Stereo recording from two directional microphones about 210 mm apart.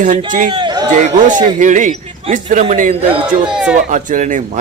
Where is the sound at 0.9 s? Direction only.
35° right (ahead or behind).